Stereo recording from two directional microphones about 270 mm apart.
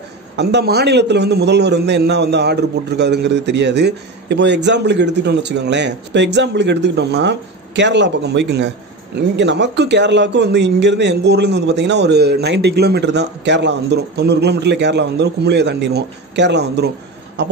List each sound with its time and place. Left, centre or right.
0.4 s a man's voice: right